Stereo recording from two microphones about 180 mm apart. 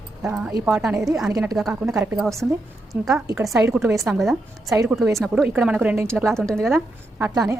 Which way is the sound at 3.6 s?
15° right (ahead or behind).